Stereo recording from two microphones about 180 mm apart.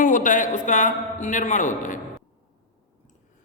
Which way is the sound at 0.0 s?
45° left (ahead or behind).